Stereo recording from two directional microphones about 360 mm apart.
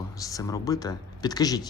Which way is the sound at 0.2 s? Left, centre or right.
Centre.